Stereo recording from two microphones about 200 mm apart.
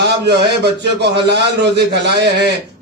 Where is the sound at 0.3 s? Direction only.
55° right (ahead or behind).